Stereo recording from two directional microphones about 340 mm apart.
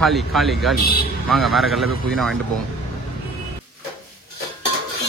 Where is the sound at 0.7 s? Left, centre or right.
Left.